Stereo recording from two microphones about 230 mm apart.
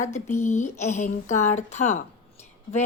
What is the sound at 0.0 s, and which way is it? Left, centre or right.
Speech, left.